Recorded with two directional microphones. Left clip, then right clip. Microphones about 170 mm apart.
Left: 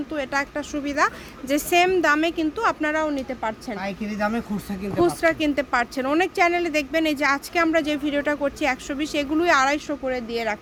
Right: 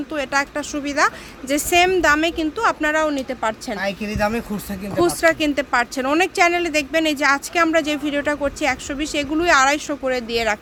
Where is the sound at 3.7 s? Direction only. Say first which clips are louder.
Right 5 dB; 30° right (ahead or behind).